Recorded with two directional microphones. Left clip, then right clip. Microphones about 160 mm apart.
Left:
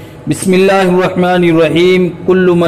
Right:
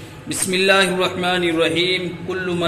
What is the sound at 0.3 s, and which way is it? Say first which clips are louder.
A man's voice: left 7 dB; 45° left (ahead or behind).